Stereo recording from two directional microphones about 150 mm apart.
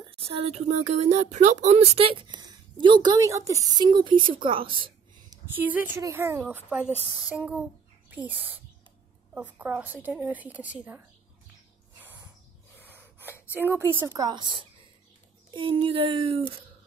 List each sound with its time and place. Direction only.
0.1 s speech: 40° right (ahead or behind)
5.5 s a woman's voice: 10° right (ahead or behind)
12.9 s speech: 15° right (ahead or behind); by 16.4 s 35° right (ahead or behind)